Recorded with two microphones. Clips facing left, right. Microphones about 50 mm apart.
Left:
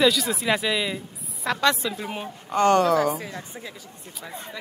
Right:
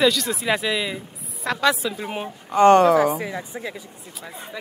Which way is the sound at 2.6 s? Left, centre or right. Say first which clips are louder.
Right 5 dB; right.